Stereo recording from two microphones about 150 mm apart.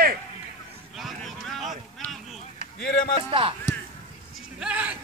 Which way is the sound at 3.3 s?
35° right (ahead or behind).